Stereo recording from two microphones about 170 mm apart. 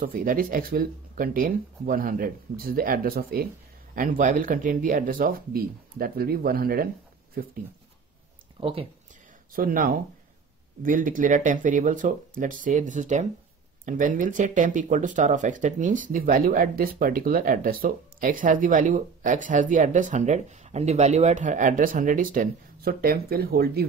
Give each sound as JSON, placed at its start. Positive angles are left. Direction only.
{"t": 0.0, "sound": "speech", "side_deg": -55}
{"t": 3.9, "sound": "speech", "side_deg": -50}
{"t": 8.5, "sound": "speech", "side_deg": -30}
{"t": 9.5, "sound": "speech", "side_deg": -55}